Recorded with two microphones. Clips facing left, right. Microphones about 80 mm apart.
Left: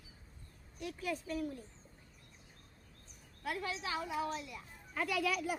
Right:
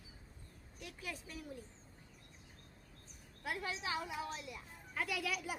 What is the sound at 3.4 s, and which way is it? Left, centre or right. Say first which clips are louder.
A child's voice: left 2 dB; centre.